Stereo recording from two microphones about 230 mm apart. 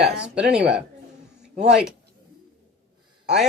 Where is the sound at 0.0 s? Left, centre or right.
Centre.